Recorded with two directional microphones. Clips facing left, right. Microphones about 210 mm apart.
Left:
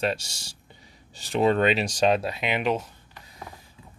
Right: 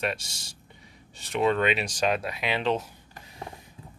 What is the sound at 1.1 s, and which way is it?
Speech, 35° left (ahead or behind).